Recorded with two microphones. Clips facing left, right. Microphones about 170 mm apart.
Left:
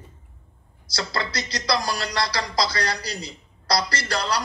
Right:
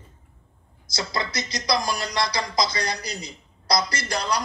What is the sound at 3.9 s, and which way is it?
Speech, 15° right (ahead or behind).